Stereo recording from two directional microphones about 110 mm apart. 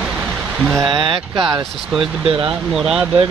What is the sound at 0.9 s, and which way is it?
Speech, 50° right (ahead or behind).